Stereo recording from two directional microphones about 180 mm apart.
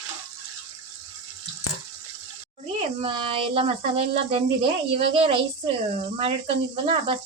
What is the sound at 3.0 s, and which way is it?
Speech, 30° right (ahead or behind).